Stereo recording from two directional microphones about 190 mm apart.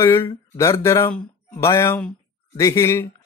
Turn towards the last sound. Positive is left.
turn(degrees=15)  # may be behind; listen again after turning